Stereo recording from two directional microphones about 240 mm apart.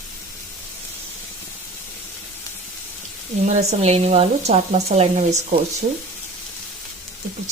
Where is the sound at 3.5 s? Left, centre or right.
Right.